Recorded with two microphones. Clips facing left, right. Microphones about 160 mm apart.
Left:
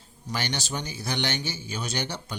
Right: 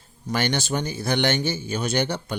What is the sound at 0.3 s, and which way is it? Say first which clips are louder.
Speech: right 7 dB; 55° right (ahead or behind).